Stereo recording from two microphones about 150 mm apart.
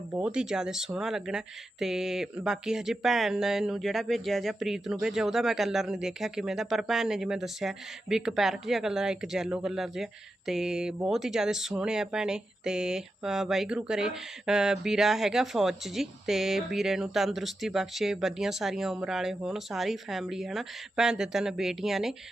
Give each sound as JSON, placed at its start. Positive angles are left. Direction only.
{"t": 0.2, "sound": "speech", "side_deg": -5}